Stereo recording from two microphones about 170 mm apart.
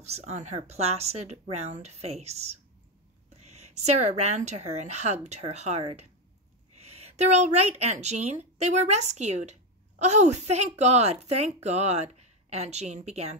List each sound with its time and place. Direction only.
0.0 s speech: 40° right (ahead or behind)
6.9 s a sound: 40° right (ahead or behind)
7.8 s speech: 40° right (ahead or behind)